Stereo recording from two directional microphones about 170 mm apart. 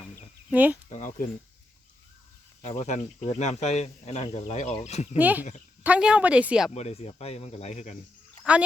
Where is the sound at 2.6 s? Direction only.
40° left (ahead or behind).